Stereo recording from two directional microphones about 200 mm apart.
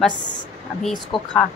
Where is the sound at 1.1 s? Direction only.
25° left (ahead or behind).